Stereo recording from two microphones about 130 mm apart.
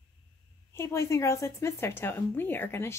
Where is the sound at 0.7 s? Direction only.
20° left (ahead or behind).